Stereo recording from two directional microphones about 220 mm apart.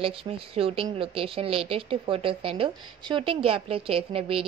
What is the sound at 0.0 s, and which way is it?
A woman's voice, 25° right (ahead or behind).